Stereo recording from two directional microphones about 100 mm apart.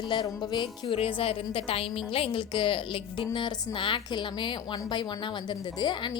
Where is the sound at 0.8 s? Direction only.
65° left (ahead or behind).